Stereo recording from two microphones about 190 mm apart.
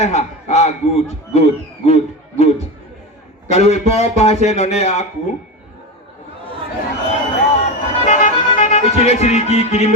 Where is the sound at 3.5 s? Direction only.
35° left (ahead or behind).